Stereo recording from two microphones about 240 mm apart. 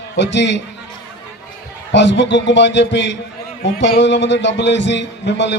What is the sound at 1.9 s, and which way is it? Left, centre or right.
A man's voice, left.